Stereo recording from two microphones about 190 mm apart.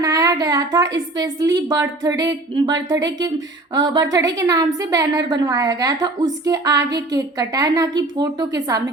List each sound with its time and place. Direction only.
0.0 s a woman's voice: 20° right (ahead or behind)